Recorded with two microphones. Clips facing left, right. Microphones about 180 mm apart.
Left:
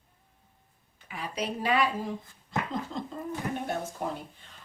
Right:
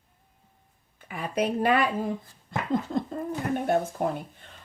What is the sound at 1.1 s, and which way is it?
Speech, 55° right (ahead or behind).